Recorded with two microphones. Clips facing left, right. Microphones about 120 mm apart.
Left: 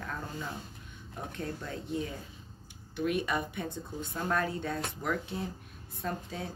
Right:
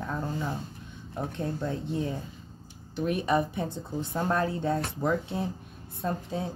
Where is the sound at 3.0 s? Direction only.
30° right (ahead or behind).